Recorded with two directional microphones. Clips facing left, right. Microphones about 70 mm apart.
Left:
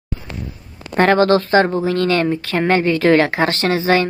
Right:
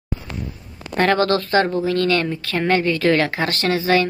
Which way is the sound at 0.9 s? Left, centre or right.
Left.